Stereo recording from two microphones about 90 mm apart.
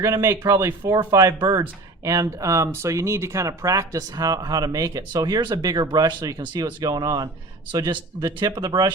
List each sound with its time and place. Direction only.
0.0 s speech: 30° right (ahead or behind); by 8.9 s 55° right (ahead or behind)